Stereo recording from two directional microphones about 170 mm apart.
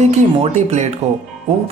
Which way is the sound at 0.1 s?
40° right (ahead or behind).